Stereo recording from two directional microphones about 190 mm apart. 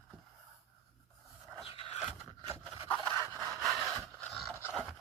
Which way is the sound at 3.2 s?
15° right (ahead or behind).